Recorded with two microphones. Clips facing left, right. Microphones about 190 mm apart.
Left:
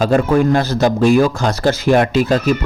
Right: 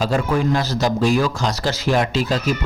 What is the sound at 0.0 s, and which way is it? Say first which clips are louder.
A man's voice: left 6 dB; 55° left (ahead or behind).